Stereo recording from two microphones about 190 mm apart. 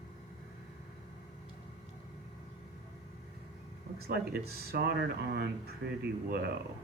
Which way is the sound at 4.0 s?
55° right (ahead or behind).